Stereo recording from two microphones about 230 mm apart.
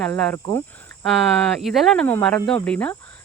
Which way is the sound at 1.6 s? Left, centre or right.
Centre.